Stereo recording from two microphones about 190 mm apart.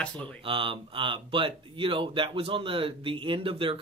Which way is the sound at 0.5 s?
25° right (ahead or behind).